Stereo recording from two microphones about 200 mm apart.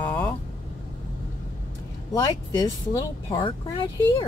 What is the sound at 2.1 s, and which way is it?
A woman's voice, 20° left (ahead or behind).